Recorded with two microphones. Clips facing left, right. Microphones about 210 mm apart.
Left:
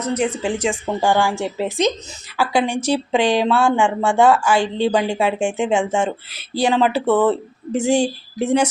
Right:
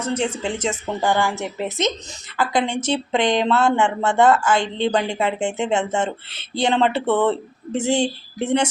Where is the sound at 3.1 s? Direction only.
10° left (ahead or behind).